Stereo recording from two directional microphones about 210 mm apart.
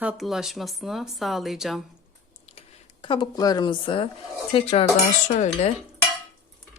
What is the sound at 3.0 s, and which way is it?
Speech, 20° left (ahead or behind).